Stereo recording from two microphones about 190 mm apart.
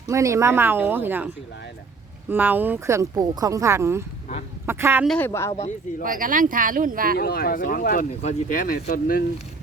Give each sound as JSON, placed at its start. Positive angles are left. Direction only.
{"t": 0.1, "sound": "speech", "side_deg": -15}
{"t": 2.3, "sound": "speech", "side_deg": -10}
{"t": 5.0, "sound": "speech", "side_deg": 10}
{"t": 6.0, "sound": "speech", "side_deg": -45}
{"t": 7.2, "sound": "speech", "side_deg": 55}